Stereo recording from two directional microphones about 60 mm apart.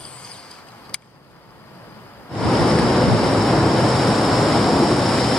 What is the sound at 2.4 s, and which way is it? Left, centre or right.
Waves, centre.